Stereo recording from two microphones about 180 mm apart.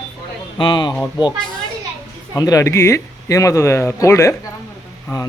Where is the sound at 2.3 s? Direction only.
20° left (ahead or behind).